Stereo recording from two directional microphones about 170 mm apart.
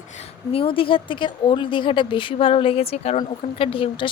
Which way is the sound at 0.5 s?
30° left (ahead or behind).